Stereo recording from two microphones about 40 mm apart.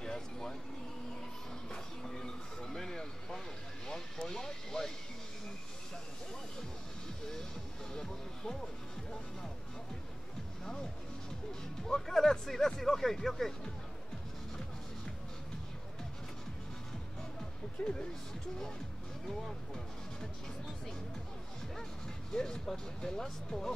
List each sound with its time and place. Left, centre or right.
0.0 s a sound: centre
2.0 s vehicle: centre
7.9 s music: centre
10.6 s music: centre
11.8 s a sound: centre
22.3 s speech: centre